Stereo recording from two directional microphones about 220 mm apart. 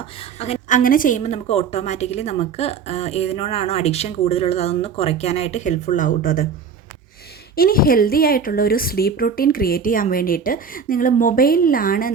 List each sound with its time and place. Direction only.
0.3 s a woman's voice: 30° left (ahead or behind)
7.5 s a woman's voice: 40° left (ahead or behind)